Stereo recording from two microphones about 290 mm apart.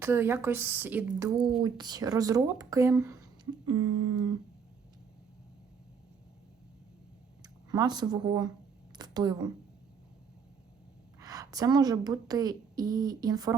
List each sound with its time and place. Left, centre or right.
0.0 s a woman's voice: centre
1.6 s a woman's voice: centre
3.7 s a sound: right
7.4 s speech: centre
11.2 s a woman's voice: centre